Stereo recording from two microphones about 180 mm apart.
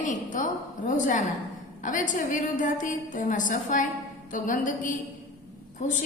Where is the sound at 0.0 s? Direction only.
45° left (ahead or behind).